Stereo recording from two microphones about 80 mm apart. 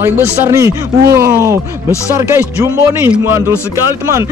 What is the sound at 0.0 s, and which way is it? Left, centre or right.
Speech, right.